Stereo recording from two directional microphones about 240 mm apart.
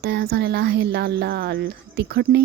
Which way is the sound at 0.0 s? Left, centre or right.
Right.